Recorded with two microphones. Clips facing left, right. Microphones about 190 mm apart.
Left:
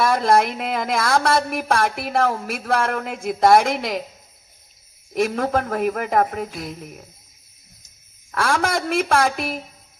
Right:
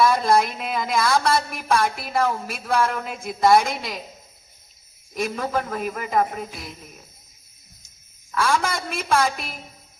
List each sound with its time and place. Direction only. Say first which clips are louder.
0.0 s speech: left 1 dB; 60° left (ahead or behind)
5.1 s speech: left 5 dB; 65° left (ahead or behind)
6.5 s cricket: left 6 dB; centre (ahead or behind)
8.4 s speech: left 2 dB; 60° left (ahead or behind)